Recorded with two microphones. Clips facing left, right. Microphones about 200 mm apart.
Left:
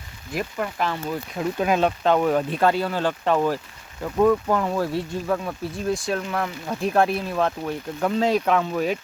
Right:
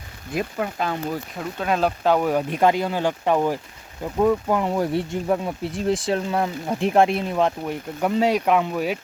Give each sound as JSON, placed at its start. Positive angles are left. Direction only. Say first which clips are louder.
{"t": 0.3, "sound": "speech", "louder": "right 1 dB", "side_deg": -20}
{"t": 1.5, "sound": "speech", "louder": "left 1 dB", "side_deg": 5}
{"t": 2.0, "sound": "speech", "louder": "right 1 dB", "side_deg": -10}